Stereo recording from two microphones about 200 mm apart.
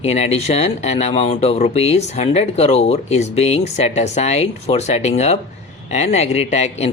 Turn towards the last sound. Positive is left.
turn(degrees=35)  # may be behind; listen again after turning